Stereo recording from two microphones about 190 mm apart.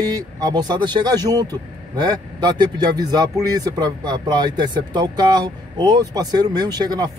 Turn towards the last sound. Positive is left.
turn(degrees=-20)  # may be behind; listen again after turning